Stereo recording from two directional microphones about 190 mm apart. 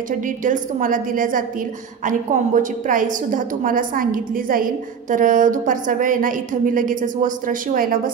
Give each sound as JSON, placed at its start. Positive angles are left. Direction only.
{"t": 0.4, "sound": "a woman's voice", "side_deg": -45}